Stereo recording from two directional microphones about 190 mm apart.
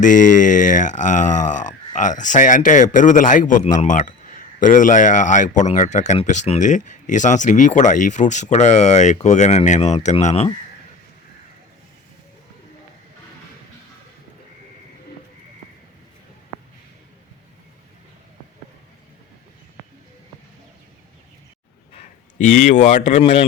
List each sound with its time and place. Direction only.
0.0 s speech: 45° left (ahead or behind)
21.9 s a man's voice: 40° left (ahead or behind)